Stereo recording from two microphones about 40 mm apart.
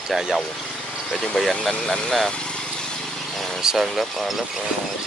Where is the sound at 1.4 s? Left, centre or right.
Left.